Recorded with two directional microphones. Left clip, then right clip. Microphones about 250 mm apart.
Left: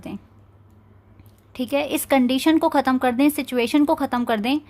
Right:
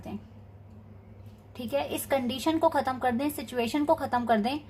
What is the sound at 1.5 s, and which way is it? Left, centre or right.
A woman's voice, left.